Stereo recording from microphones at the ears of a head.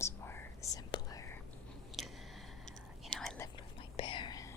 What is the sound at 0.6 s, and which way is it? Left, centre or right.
Whispering, left.